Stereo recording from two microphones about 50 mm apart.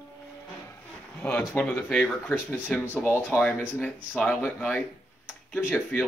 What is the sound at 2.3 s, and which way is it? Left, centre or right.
Speech, left.